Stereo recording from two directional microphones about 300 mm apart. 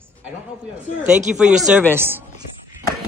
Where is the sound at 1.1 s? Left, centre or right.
Centre.